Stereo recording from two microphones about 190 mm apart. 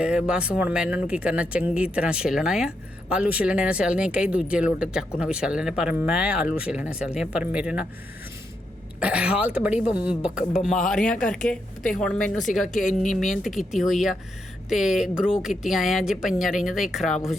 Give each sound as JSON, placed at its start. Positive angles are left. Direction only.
{"t": 0.0, "sound": "speech", "side_deg": -5}
{"t": 9.0, "sound": "a woman's voice", "side_deg": -5}
{"t": 10.8, "sound": "speech", "side_deg": 5}
{"t": 12.9, "sound": "speech", "side_deg": 40}
{"t": 13.1, "sound": "speech", "side_deg": 0}